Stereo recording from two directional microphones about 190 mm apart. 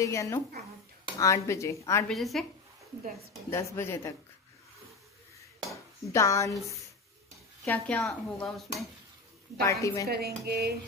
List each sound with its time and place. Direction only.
0.0 s speech: 15° left (ahead or behind)
2.0 s speech: centre (ahead or behind)
3.4 s speech: 15° left (ahead or behind)
5.7 s dishes: 15° left (ahead or behind)
7.6 s speech: 10° left (ahead or behind)
9.7 s speech: 15° left (ahead or behind)
10.0 s dishes: 55° right (ahead or behind)